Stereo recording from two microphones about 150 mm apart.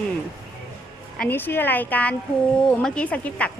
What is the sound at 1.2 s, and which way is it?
A woman's voice, 15° left (ahead or behind).